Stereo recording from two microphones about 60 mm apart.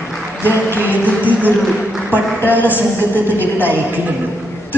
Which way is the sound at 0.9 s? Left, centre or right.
Right.